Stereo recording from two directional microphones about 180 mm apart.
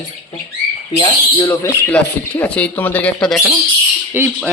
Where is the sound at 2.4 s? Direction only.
10° left (ahead or behind).